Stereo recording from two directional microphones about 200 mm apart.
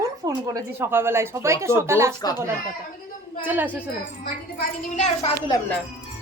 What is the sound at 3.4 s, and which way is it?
Speech, 10° right (ahead or behind).